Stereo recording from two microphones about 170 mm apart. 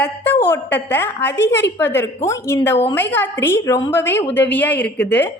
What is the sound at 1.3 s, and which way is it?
Speech, 90° left.